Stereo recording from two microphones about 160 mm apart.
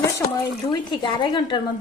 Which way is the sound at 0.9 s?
30° left (ahead or behind).